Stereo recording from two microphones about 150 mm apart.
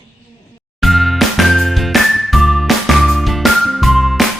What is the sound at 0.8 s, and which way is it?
Music, centre (ahead or behind).